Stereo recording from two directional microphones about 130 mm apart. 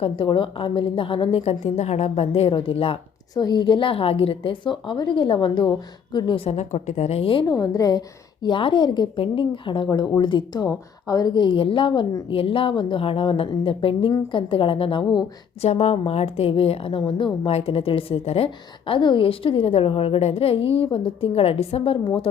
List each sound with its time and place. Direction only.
0.0 s a woman's voice: 40° left (ahead or behind)
3.3 s a woman's voice: 35° left (ahead or behind)
7.6 s a woman's voice: 30° left (ahead or behind); by 15.0 s 45° left (ahead or behind)
15.6 s a woman's voice: 55° left (ahead or behind); by 17.5 s 40° left (ahead or behind)
17.5 s a woman's voice: 50° left (ahead or behind)